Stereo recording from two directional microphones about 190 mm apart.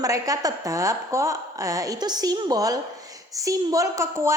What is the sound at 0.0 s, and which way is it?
A woman's voice, 20° right (ahead or behind).